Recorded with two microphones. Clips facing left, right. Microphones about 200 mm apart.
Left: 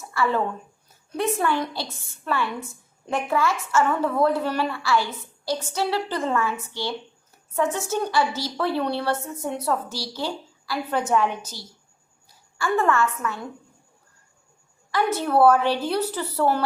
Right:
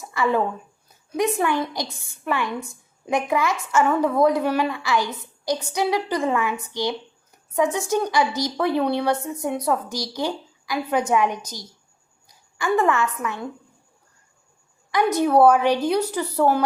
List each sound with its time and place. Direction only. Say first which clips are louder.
0.0 s a woman's voice: right 2 dB; 15° right (ahead or behind)
14.8 s a woman's voice: right 4 dB; 15° right (ahead or behind)